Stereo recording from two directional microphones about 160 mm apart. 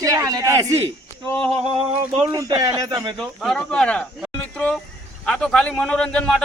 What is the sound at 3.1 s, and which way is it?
A man's voice, centre (ahead or behind).